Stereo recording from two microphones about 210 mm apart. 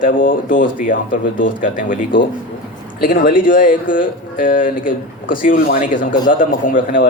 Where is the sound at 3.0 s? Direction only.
40° left (ahead or behind).